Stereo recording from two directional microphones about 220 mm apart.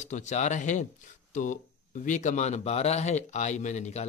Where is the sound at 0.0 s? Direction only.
30° left (ahead or behind).